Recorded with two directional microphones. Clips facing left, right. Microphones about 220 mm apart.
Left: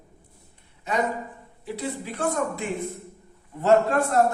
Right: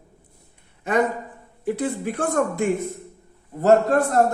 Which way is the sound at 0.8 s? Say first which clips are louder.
Right 5 dB; 55° right (ahead or behind).